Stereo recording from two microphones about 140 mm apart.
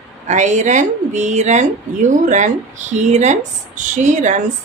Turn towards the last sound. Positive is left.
turn(degrees=-60)  # may be behind; listen again after turning